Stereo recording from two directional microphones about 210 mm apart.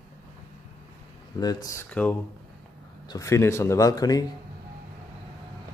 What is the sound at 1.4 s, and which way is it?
Speech, 20° left (ahead or behind).